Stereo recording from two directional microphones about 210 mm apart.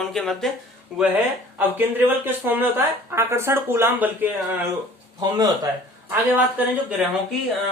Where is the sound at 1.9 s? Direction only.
10° right (ahead or behind).